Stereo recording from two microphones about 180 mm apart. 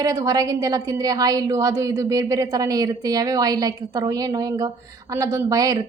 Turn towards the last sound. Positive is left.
turn(degrees=-20)  # may be behind; listen again after turning